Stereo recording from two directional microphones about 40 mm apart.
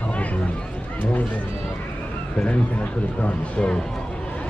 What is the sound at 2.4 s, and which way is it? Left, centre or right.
Run, left.